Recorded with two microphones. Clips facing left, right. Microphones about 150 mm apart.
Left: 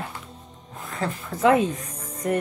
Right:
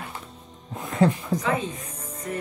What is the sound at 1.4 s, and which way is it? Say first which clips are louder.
Speech: left 8 dB; 65° left (ahead or behind).